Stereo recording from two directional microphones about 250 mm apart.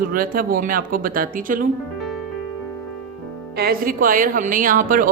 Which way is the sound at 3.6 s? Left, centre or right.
Right.